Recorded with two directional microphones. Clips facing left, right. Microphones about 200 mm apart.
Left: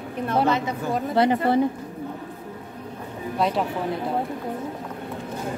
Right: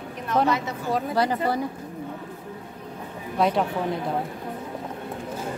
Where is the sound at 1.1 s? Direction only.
25° left (ahead or behind).